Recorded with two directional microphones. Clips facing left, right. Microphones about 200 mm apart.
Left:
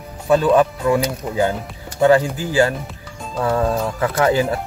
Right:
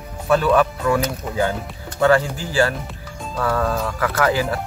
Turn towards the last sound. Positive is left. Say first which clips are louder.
# left 3 dB
turn(degrees=25)  # may be behind; listen again after turning